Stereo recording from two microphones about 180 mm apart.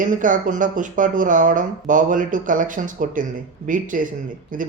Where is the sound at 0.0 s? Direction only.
45° right (ahead or behind).